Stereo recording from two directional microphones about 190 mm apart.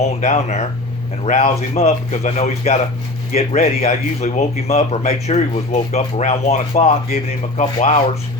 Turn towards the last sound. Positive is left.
turn(degrees=30)  # may be behind; listen again after turning